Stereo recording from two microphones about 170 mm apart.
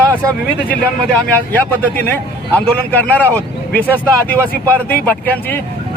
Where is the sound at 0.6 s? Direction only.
10° left (ahead or behind).